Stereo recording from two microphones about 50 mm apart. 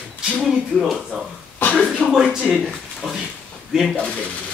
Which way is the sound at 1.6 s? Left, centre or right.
Left.